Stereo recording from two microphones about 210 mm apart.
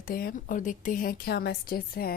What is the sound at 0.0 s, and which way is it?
A woman's voice, 45° left (ahead or behind).